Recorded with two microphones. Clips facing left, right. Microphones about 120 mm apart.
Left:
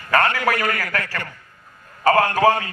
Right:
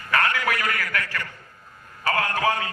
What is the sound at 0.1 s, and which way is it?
A man's voice, 40° left (ahead or behind).